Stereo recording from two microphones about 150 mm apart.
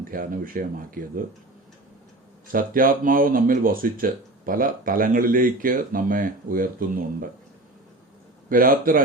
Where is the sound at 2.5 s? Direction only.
70° right (ahead or behind).